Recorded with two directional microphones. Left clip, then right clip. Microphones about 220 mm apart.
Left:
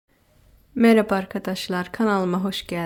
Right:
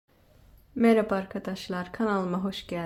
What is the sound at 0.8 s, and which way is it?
Speech, 30° left (ahead or behind).